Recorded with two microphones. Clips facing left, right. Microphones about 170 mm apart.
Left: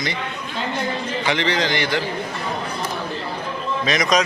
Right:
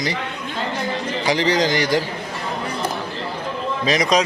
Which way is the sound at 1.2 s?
35° right (ahead or behind).